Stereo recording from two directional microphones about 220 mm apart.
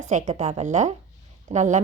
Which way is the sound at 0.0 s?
35° right (ahead or behind).